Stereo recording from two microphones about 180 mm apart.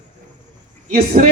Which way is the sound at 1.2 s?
45° right (ahead or behind).